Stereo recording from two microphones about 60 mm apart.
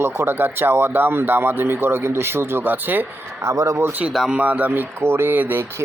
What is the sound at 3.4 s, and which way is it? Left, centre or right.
Speech, right.